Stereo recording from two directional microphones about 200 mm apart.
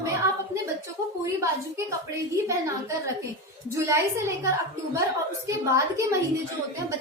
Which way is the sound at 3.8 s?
15° right (ahead or behind).